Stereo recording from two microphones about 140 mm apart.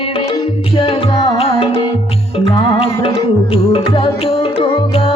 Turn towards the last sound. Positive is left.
turn(degrees=45)  # may be behind; listen again after turning